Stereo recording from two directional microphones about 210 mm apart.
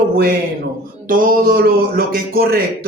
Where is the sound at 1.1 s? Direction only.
40° right (ahead or behind).